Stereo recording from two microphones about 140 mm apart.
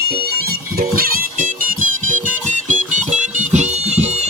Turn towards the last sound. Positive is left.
turn(degrees=-60)  # may be behind; listen again after turning